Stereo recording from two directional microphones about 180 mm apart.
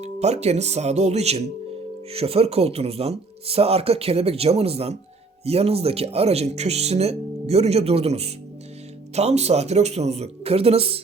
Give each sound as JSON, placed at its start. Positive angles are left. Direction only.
{"t": 0.0, "sound": "speech", "side_deg": -35}